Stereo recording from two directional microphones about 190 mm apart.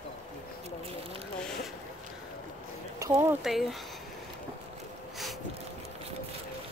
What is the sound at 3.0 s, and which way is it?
Speech, 15° right (ahead or behind).